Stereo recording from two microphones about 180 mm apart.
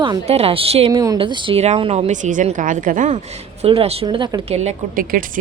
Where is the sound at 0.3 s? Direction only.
35° right (ahead or behind).